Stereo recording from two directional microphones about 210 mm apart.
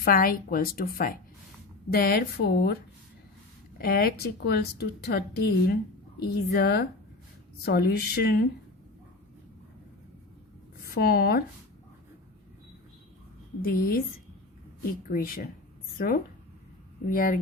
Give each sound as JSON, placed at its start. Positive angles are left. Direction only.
{"t": 0.0, "sound": "a woman's voice", "side_deg": 45}
{"t": 3.8, "sound": "a woman's voice", "side_deg": 45}
{"t": 10.8, "sound": "speech", "side_deg": 45}
{"t": 13.6, "sound": "a woman's voice", "side_deg": 45}
{"t": 15.1, "sound": "a woman's voice", "side_deg": 45}